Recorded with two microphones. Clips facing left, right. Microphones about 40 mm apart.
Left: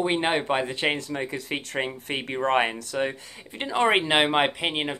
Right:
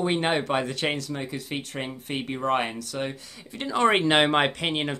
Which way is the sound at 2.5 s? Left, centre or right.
Left.